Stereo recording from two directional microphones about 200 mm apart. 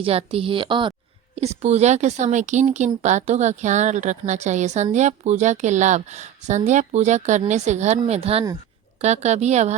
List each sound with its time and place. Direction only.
0.0 s a woman's voice: 30° right (ahead or behind)